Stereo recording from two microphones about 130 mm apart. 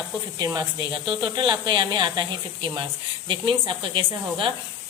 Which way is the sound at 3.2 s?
40° right (ahead or behind).